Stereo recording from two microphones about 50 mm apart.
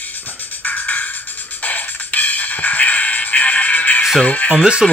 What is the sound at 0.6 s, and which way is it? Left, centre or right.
Music, left.